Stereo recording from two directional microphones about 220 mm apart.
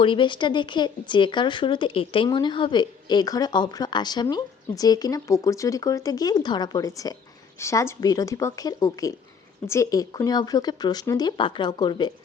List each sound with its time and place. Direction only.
0.0 s speech: 20° left (ahead or behind)